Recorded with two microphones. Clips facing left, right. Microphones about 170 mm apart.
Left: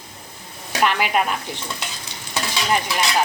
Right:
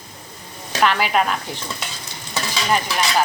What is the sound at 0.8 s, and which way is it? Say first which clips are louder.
Speech: right 1 dB; 10° left (ahead or behind).